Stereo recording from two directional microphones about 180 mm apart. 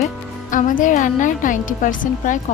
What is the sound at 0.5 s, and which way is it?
Speech, 45° left (ahead or behind).